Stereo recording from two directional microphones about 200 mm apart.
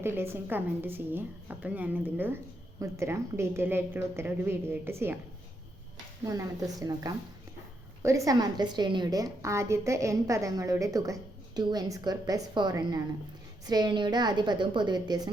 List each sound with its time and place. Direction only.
0.0 s a woman's voice: 10° right (ahead or behind)
6.2 s a woman's voice: 15° right (ahead or behind)